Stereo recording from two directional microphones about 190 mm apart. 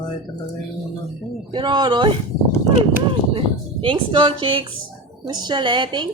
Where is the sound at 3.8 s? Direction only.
25° right (ahead or behind).